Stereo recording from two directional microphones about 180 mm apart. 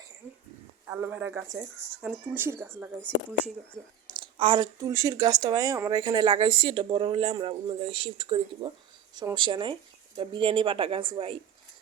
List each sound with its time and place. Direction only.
0.9 s speech: 10° right (ahead or behind)
4.0 s speech: 25° right (ahead or behind)